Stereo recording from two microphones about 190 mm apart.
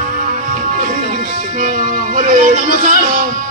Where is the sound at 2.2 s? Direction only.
45° right (ahead or behind).